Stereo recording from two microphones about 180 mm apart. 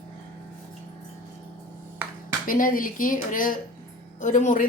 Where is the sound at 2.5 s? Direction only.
50° left (ahead or behind).